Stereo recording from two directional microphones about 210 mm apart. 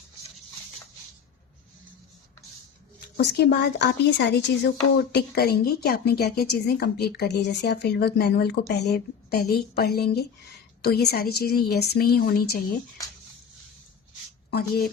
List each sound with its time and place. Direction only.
3.2 s a woman's voice: 50° left (ahead or behind)
14.5 s a woman's voice: 45° left (ahead or behind)